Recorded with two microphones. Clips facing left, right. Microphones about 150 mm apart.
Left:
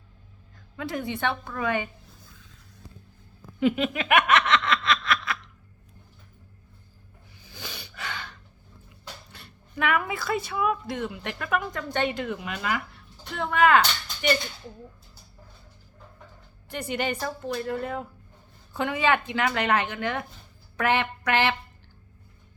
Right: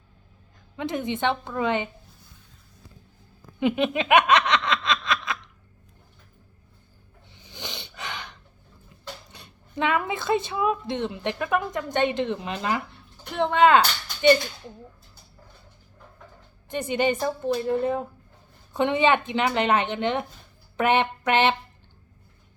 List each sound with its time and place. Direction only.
0.8 s speech: 20° right (ahead or behind)
3.6 s a sound: 20° right (ahead or behind)
7.3 s snort: 20° right (ahead or behind)
9.3 s speech: 20° right (ahead or behind)
16.6 s speech: 20° right (ahead or behind)